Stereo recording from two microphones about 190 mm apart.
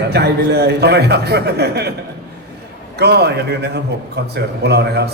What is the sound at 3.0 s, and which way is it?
A man's voice, 60° right (ahead or behind).